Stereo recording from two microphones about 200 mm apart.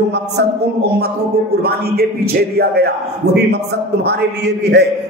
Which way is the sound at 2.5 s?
50° right (ahead or behind).